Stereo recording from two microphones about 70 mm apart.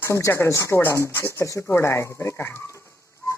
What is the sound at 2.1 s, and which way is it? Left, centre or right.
Speech, left.